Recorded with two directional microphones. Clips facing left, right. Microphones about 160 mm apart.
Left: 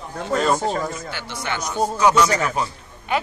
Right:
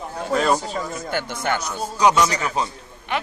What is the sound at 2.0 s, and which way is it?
Speech, 20° right (ahead or behind).